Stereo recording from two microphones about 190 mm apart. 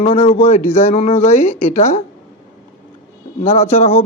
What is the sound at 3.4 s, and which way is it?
Speech, 35° left (ahead or behind).